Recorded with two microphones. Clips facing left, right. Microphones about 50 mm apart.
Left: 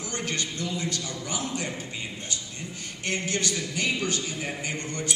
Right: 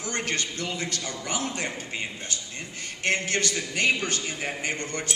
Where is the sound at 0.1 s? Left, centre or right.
Right.